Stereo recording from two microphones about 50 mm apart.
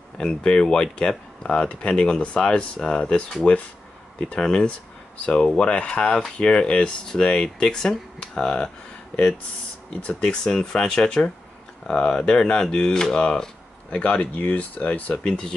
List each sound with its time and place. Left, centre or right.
0.2 s speech: centre
10.0 s speech: centre
15.2 s speech: centre